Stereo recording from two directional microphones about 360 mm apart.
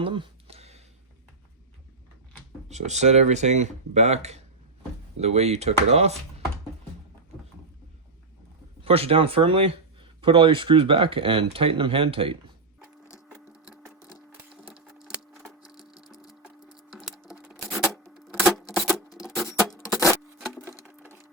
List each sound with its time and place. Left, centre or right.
0.0 s a sound: centre
2.6 s speech: centre
8.8 s speech: centre
13.1 s sewing machine: centre
14.1 s a sound: centre
19.2 s patter: centre
20.1 s wood: centre